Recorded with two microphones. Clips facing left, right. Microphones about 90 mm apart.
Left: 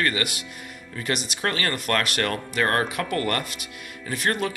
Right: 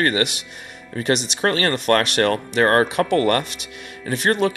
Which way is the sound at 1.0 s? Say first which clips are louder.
Right 7 dB; 25° right (ahead or behind).